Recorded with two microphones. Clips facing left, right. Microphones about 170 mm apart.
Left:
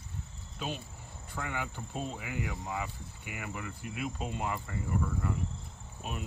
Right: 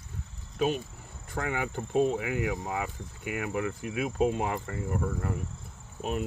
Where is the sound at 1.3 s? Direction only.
55° right (ahead or behind).